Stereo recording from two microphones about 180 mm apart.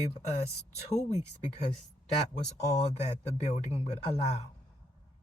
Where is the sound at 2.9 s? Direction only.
40° left (ahead or behind).